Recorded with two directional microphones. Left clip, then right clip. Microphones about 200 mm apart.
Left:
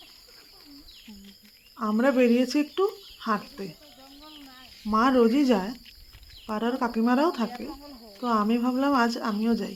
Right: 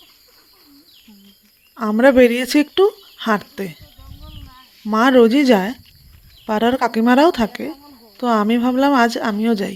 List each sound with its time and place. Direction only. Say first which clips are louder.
1.7 s speech: right 11 dB; 30° right (ahead or behind)
4.9 s speech: right 9 dB; 30° right (ahead or behind)